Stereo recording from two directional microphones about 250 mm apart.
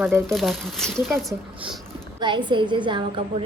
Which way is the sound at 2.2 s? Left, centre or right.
Centre.